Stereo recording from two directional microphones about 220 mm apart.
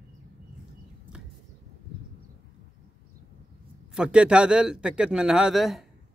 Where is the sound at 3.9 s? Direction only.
5° right (ahead or behind).